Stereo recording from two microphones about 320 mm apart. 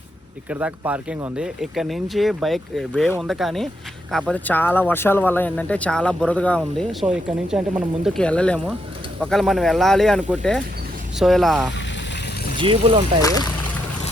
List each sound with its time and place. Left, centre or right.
0.5 s speech: centre
12.5 s speech: centre